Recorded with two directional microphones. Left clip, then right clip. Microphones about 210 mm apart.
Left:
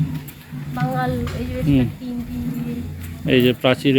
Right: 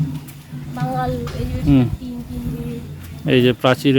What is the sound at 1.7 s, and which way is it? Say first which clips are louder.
Speech: right 3 dB; 25° right (ahead or behind).